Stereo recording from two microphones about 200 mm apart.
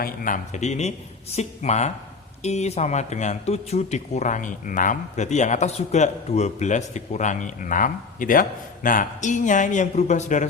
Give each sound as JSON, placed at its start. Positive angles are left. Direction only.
{"t": 0.0, "sound": "speech", "side_deg": 45}